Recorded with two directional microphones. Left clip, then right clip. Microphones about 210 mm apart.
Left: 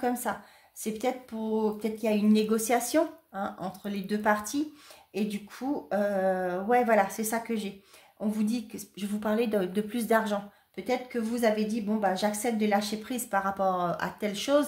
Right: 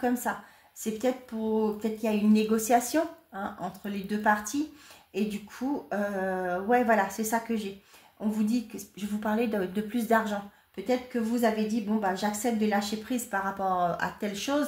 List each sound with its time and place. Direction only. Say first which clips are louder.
0.0 s a woman's voice: right 1 dB; 35° left (ahead or behind)